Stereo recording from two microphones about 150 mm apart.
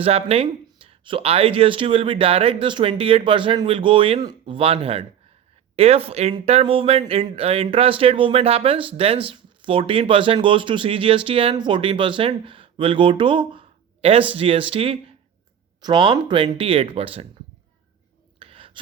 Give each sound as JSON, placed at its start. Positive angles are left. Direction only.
{"t": 0.0, "sound": "speech", "side_deg": -40}
{"t": 18.3, "sound": "whispering", "side_deg": -40}